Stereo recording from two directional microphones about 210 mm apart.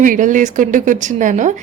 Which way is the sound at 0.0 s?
40° right (ahead or behind).